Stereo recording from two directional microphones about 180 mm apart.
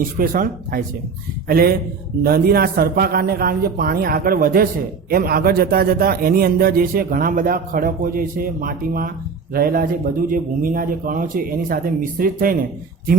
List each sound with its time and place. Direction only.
0.2 s a man's voice: 50° right (ahead or behind)